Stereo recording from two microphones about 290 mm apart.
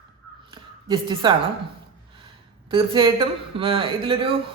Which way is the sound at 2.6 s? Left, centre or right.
Centre.